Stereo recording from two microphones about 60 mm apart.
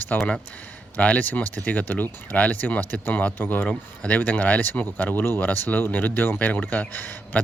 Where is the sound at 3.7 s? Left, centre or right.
Left.